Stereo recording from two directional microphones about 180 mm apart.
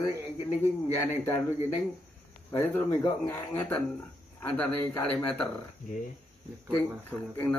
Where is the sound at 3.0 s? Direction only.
15° left (ahead or behind).